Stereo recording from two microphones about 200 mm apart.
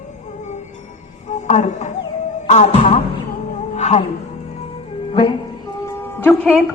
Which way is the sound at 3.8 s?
35° left (ahead or behind).